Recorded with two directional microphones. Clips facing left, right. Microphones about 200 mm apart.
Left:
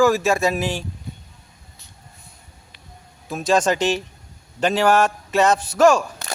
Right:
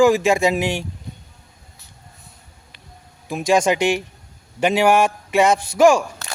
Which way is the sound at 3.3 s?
15° right (ahead or behind).